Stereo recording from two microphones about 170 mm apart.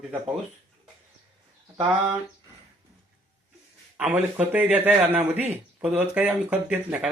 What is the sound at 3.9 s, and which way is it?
A man's voice, 10° right (ahead or behind).